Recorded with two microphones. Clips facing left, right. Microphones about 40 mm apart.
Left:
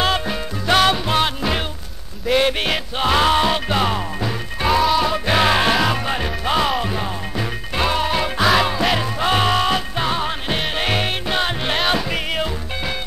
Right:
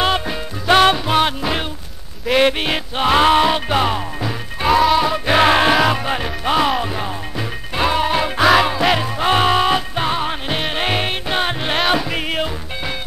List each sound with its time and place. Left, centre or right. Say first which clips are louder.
0.7 s music: right 3 dB; centre
0.9 s music: right 2 dB; centre